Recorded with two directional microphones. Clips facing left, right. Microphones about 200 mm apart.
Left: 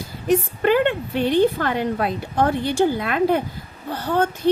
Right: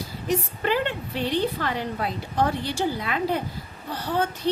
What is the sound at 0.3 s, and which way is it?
A woman's voice, 55° left (ahead or behind).